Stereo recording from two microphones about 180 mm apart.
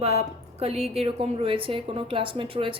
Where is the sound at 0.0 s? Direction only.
35° right (ahead or behind).